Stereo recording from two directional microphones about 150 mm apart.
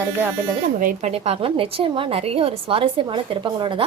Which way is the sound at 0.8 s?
65° right (ahead or behind).